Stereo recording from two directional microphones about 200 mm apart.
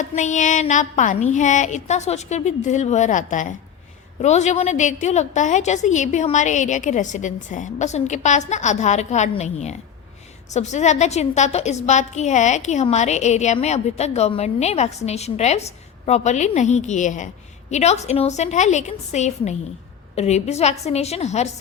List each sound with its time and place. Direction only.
0.0 s a woman's voice: 35° left (ahead or behind)